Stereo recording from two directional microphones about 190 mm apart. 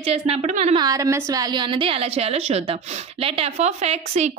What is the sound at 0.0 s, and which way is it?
Speech, 30° right (ahead or behind).